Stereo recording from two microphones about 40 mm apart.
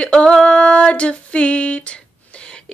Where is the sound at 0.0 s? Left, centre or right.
Left.